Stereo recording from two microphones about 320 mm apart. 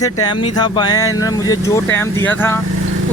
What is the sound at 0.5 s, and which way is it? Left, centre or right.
Speech, centre.